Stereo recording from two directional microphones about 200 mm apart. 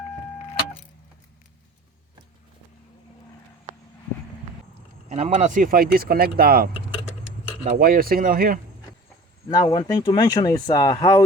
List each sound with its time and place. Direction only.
5.0 s speech: 35° right (ahead or behind)
9.5 s speech: 20° left (ahead or behind)